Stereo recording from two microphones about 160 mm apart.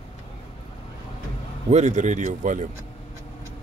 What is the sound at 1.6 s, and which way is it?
Speech, 45° right (ahead or behind).